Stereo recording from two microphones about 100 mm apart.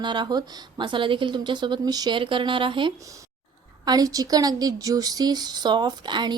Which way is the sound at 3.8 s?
40° right (ahead or behind).